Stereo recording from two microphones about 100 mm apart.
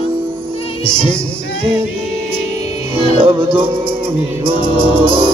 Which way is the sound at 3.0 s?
60° right (ahead or behind).